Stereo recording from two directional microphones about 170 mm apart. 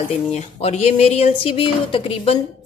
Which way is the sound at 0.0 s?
40° left (ahead or behind).